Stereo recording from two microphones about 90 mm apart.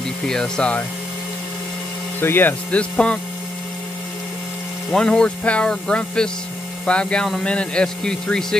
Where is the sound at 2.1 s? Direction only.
25° left (ahead or behind).